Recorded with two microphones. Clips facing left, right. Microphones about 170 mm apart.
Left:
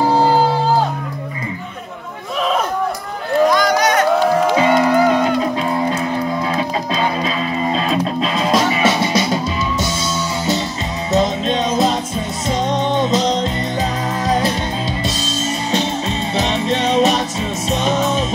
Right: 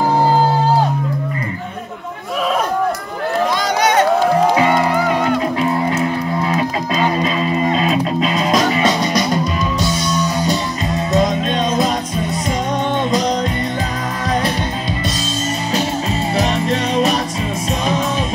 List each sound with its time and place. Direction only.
3.4 s a sound: 25° right (ahead or behind)
8.8 s music: 25° left (ahead or behind)
11.1 s music: 20° left (ahead or behind)
16.3 s music: centre (ahead or behind)